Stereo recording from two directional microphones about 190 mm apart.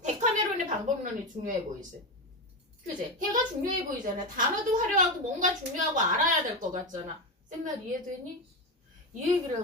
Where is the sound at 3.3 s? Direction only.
45° right (ahead or behind).